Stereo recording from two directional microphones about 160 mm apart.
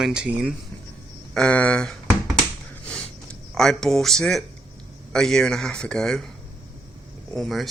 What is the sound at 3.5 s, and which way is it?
Speech, 5° left (ahead or behind).